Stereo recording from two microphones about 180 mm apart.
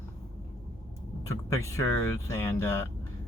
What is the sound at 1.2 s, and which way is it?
Speech, 15° left (ahead or behind).